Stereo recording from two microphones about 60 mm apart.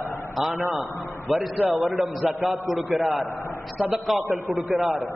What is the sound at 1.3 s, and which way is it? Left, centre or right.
A man's voice, centre.